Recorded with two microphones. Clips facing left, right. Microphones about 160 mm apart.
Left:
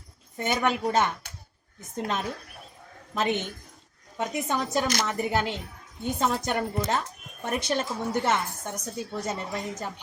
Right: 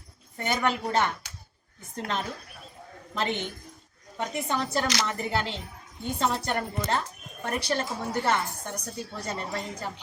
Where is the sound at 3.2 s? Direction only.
20° left (ahead or behind).